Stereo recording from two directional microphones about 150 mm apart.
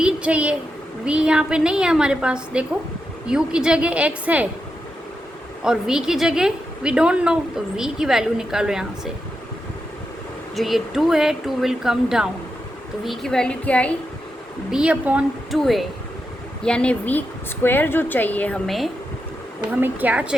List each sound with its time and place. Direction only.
0.0 s a sound: 10° right (ahead or behind)
1.0 s a woman's voice: 5° right (ahead or behind)
5.6 s speech: 5° right (ahead or behind)
10.5 s speech: centre (ahead or behind)
14.7 s a woman's voice: 5° right (ahead or behind)
19.8 s a woman's voice: 10° right (ahead or behind)